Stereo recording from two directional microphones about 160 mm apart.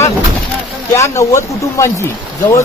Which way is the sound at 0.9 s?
20° left (ahead or behind).